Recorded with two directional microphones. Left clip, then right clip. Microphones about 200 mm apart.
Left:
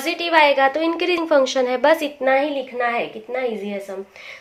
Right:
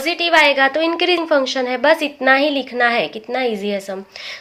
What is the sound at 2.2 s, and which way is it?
A woman's voice, 35° right (ahead or behind).